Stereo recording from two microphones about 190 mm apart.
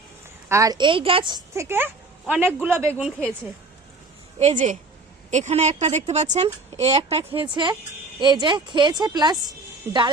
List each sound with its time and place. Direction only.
0.4 s a woman's voice: 15° right (ahead or behind)
4.4 s a woman's voice: 35° right (ahead or behind); by 10.0 s 10° right (ahead or behind)